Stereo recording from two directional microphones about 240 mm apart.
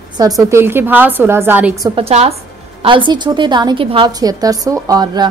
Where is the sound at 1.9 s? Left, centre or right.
Right.